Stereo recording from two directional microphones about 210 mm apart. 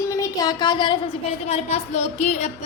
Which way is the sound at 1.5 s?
30° left (ahead or behind).